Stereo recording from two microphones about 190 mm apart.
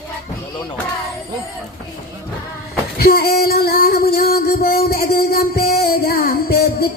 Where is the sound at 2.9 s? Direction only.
55° left (ahead or behind).